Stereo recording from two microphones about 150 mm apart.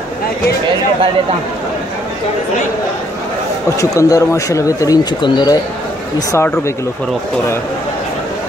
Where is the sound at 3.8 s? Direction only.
20° left (ahead or behind).